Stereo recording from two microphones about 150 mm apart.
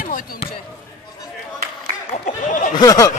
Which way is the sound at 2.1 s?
50° left (ahead or behind).